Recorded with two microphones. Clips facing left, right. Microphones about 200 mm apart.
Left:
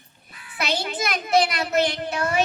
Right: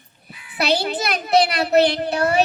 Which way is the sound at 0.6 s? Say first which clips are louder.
Right 5 dB; 35° right (ahead or behind).